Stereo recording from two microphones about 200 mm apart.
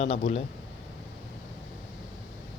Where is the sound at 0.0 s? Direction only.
30° left (ahead or behind).